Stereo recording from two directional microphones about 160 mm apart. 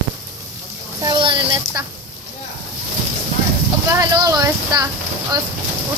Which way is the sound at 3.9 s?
20° right (ahead or behind).